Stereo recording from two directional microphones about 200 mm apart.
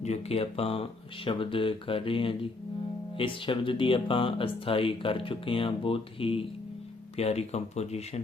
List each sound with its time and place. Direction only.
0.0 s speech: 30° left (ahead or behind)